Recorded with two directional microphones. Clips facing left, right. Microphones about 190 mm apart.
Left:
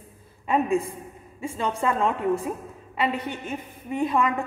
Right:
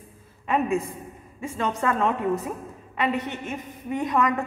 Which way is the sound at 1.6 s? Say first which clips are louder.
Even; 15° left (ahead or behind).